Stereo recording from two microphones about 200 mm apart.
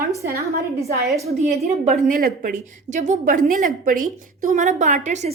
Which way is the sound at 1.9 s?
40° right (ahead or behind).